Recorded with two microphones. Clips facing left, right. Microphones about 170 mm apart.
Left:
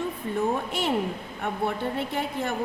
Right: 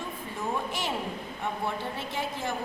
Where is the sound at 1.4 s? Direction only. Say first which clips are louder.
Left 5 dB; 60° left (ahead or behind).